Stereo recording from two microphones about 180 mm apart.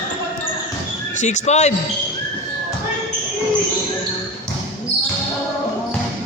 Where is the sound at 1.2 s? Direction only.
40° left (ahead or behind).